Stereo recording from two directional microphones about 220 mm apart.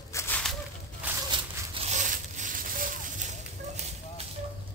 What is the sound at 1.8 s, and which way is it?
Zipper, 35° right (ahead or behind).